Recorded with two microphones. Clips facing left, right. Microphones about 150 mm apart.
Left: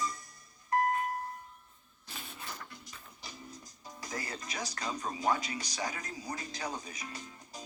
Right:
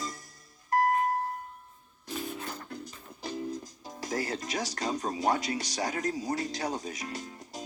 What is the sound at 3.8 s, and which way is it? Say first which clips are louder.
Music: right 7 dB; 45° right (ahead or behind).